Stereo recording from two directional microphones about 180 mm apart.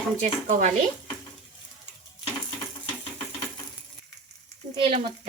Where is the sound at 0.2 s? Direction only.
45° right (ahead or behind).